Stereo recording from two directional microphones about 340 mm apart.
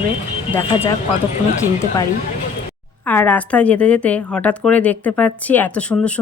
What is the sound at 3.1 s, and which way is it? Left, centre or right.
Speech, centre.